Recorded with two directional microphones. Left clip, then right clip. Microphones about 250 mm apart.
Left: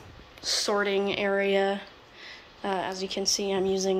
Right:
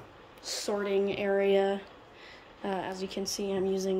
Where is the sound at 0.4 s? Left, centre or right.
Centre.